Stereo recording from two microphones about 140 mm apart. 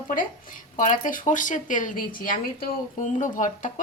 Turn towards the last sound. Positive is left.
turn(degrees=65)  # may be behind; listen again after turning